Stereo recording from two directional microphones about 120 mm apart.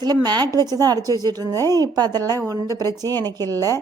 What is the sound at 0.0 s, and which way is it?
A woman's voice, 35° right (ahead or behind).